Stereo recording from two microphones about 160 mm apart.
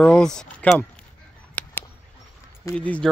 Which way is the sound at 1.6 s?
10° left (ahead or behind).